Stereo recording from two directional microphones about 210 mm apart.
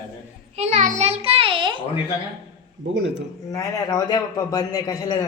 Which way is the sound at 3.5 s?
15° left (ahead or behind).